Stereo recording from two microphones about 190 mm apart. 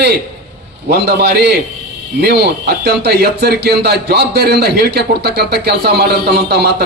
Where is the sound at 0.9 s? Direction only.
60° right (ahead or behind).